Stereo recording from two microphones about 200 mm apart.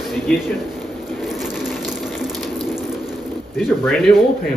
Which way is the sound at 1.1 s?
Centre (ahead or behind).